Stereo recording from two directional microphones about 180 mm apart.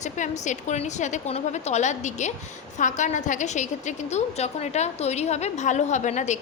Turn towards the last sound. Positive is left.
turn(degrees=40)  # may be behind; listen again after turning